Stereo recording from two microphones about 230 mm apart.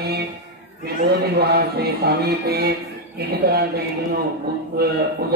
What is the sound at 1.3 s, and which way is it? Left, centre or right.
Speech, right.